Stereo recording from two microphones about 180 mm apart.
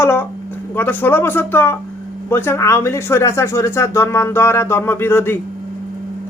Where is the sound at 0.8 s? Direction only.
10° left (ahead or behind).